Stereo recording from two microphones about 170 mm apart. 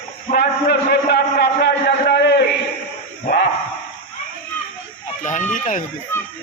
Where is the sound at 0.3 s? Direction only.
70° left (ahead or behind).